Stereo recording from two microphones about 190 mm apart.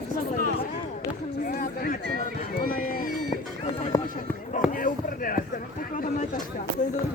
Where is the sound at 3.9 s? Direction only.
20° left (ahead or behind).